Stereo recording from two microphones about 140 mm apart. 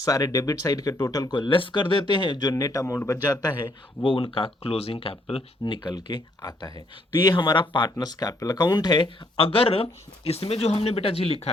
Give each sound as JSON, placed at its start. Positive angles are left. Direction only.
{"t": 0.0, "sound": "speech", "side_deg": 25}
{"t": 3.4, "sound": "speech", "side_deg": 30}